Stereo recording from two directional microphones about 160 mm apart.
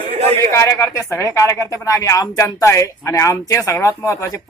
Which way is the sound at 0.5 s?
20° left (ahead or behind).